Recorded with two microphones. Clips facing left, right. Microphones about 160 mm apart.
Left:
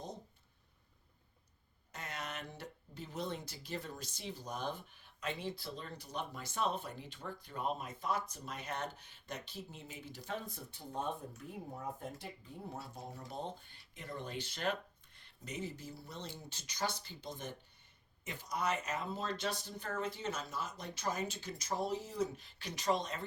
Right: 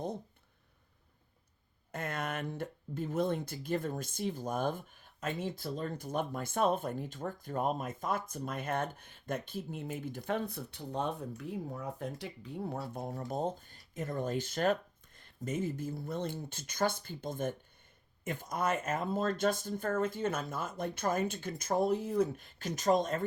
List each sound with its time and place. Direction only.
1.9 s speech: 55° right (ahead or behind)